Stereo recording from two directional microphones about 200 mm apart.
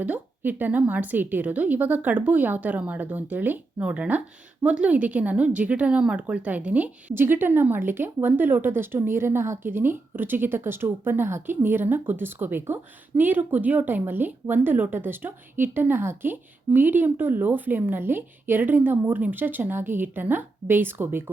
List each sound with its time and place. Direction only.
0.0 s speech: 10° right (ahead or behind)